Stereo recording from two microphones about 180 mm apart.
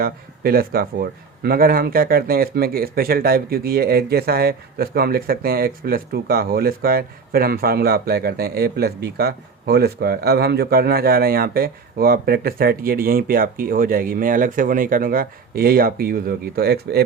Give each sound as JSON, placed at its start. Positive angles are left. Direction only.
{"t": 0.0, "sound": "speech", "side_deg": -55}